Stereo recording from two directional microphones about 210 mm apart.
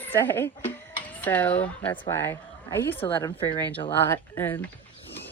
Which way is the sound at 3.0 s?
25° left (ahead or behind).